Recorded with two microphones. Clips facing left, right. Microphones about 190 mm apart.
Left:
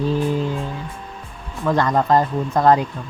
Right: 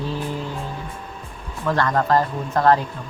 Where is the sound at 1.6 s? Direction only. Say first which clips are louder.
Left 2 dB; 15° left (ahead or behind).